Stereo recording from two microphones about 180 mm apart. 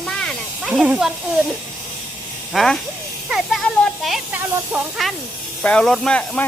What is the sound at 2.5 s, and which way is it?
Speech, centre (ahead or behind).